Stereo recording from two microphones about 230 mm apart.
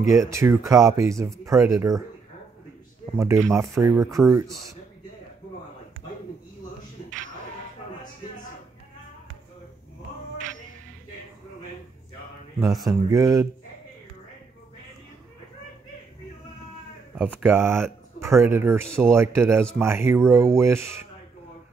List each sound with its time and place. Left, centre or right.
0.1 s speech: centre
3.2 s speech: centre
12.8 s speech: centre
17.2 s speech: centre